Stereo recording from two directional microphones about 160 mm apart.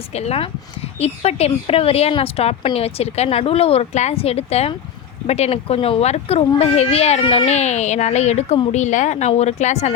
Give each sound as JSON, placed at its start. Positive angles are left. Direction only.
{"t": 0.1, "sound": "a woman's voice", "side_deg": 40}